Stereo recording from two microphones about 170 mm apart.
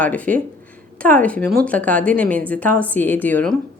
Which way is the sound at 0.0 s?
10° left (ahead or behind).